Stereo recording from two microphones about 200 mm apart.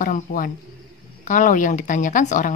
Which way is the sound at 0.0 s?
45° left (ahead or behind).